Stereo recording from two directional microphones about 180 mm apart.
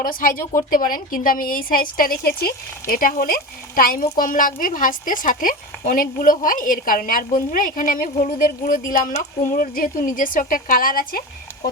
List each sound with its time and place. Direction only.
0.0 s a woman's voice: 50° left (ahead or behind)